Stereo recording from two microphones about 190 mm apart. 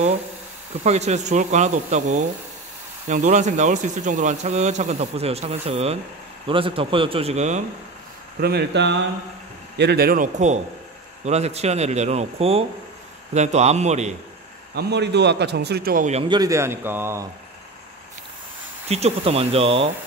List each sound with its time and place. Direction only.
0.8 s speech: 35° right (ahead or behind)
8.4 s a man's voice: 55° right (ahead or behind); by 14.1 s 35° right (ahead or behind)
14.8 s a man's voice: 60° right (ahead or behind)
16.1 s speech: 30° right (ahead or behind)
16.3 s a man's voice: 15° right (ahead or behind)
18.9 s speech: 35° right (ahead or behind)